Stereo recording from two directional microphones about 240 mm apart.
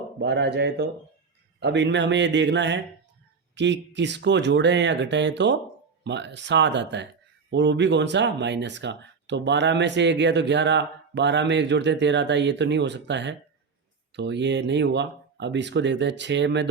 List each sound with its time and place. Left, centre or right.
0.2 s speech: right